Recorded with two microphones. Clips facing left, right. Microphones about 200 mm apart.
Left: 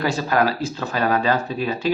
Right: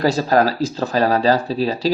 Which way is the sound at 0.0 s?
35° right (ahead or behind).